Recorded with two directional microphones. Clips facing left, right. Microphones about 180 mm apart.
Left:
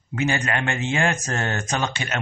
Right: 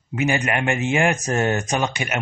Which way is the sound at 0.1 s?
15° right (ahead or behind).